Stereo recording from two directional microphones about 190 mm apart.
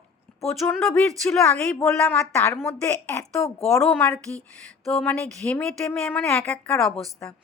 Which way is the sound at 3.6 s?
5° left (ahead or behind).